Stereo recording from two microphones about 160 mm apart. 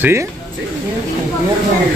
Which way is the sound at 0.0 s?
15° right (ahead or behind).